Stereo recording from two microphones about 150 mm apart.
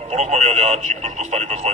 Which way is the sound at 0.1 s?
50° right (ahead or behind).